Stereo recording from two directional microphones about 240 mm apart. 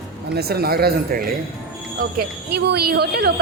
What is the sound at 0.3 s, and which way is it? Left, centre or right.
A woman's voice, right.